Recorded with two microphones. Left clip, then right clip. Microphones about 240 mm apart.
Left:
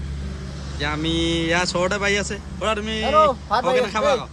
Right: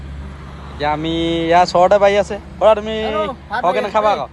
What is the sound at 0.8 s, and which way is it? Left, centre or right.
Speech, centre.